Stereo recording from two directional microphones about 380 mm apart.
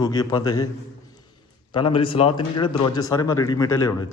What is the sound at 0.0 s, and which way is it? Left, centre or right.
Speech, centre.